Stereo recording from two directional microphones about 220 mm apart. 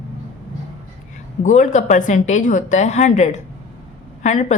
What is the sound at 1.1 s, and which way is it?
A woman's voice, 35° left (ahead or behind).